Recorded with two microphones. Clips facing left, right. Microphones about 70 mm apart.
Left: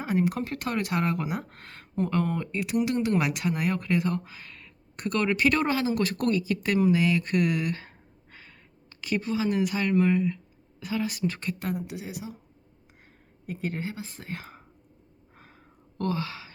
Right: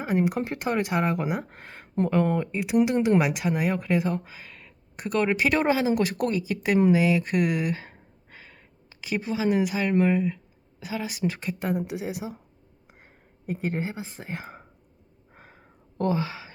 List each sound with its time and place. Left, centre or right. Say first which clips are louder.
0.0 s speech: right 2 dB; centre
3.2 s speech: right 3 dB; centre; by 12.2 s right
13.5 s speech: right 3 dB; right
15.4 s sigh: right 2 dB; centre